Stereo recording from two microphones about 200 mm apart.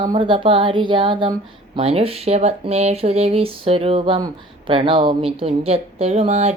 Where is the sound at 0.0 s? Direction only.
25° right (ahead or behind).